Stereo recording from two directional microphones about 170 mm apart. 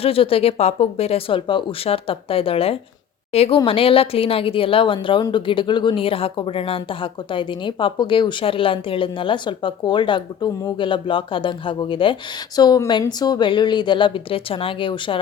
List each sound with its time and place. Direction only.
0.0 s a woman's voice: 35° left (ahead or behind)